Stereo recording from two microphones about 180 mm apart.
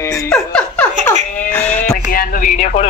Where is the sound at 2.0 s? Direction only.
55° left (ahead or behind).